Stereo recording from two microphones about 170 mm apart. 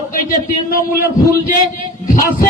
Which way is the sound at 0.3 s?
55° left (ahead or behind).